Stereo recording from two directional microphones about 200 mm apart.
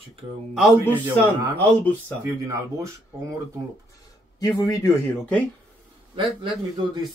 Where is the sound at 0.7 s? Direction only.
10° right (ahead or behind).